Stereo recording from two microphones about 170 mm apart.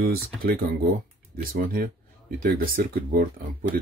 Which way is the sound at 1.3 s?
55° right (ahead or behind).